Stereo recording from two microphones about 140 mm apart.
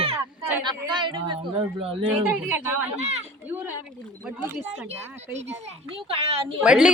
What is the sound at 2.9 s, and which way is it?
Speech, 50° right (ahead or behind).